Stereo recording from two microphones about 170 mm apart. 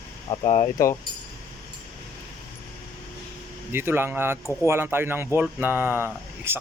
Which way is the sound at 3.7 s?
15° right (ahead or behind).